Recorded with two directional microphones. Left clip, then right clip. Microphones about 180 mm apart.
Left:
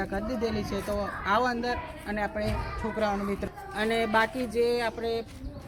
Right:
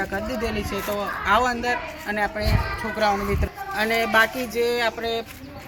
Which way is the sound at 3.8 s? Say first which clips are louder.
Right 6 dB; 10° left (ahead or behind).